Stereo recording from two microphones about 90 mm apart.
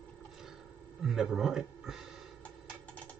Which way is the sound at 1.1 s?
5° right (ahead or behind).